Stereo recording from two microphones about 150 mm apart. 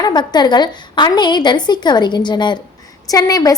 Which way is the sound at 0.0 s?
30° left (ahead or behind).